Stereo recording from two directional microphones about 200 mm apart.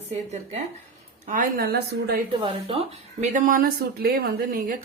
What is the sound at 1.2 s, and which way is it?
Speech, 45° right (ahead or behind).